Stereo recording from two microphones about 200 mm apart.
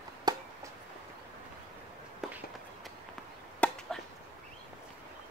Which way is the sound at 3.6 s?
5° left (ahead or behind).